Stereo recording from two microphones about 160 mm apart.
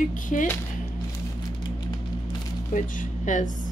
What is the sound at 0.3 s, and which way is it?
Speech, 55° left (ahead or behind).